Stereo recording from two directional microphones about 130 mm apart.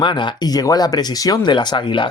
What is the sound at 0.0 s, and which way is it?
Speech, 35° left (ahead or behind).